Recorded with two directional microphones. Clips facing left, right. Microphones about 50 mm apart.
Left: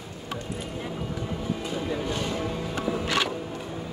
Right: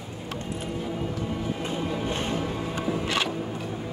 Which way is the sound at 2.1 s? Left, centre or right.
Right.